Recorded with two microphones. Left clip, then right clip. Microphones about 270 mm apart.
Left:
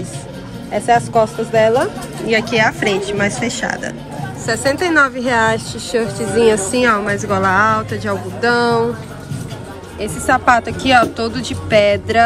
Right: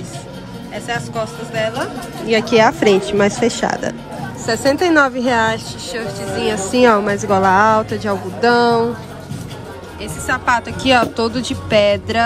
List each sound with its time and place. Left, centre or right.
0.7 s speech: centre
9.9 s speech: centre